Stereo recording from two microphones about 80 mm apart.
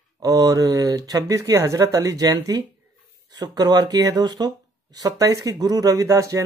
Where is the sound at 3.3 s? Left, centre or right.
Right.